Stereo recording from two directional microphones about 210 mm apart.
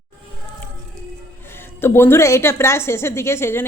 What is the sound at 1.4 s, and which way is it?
A woman's voice, 10° left (ahead or behind).